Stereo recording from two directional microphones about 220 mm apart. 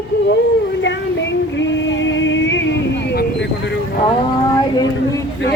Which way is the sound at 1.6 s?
60° left (ahead or behind).